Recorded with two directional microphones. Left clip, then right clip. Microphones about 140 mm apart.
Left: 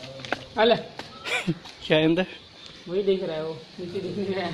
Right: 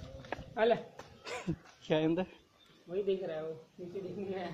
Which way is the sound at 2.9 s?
40° left (ahead or behind).